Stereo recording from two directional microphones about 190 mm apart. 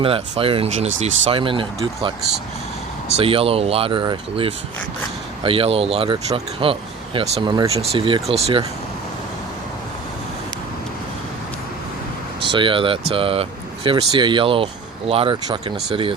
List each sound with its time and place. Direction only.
0.0 s speech: 30° right (ahead or behind)
3.2 s speech: 30° right (ahead or behind)
12.5 s speech: 25° right (ahead or behind)